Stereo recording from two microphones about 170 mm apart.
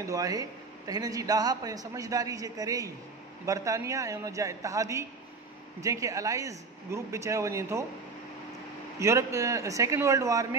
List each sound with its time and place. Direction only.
0.0 s speech: 20° right (ahead or behind)
9.0 s speech: 15° right (ahead or behind)